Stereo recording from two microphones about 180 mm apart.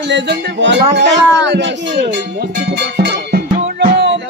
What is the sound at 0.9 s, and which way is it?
Speech, 75° right (ahead or behind).